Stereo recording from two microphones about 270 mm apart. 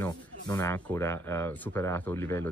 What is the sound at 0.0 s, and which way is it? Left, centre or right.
Speech, centre.